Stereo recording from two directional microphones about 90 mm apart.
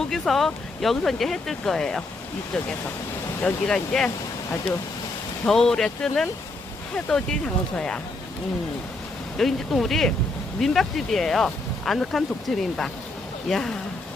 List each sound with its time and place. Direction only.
0.1 s speech: 5° left (ahead or behind)
3.4 s speech: 5° left (ahead or behind)
5.5 s speech: 5° left (ahead or behind)
9.4 s speech: 5° left (ahead or behind)